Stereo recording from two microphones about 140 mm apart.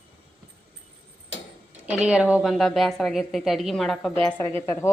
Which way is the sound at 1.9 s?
5° right (ahead or behind).